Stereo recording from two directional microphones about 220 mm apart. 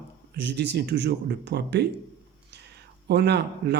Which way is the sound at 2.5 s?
50° right (ahead or behind).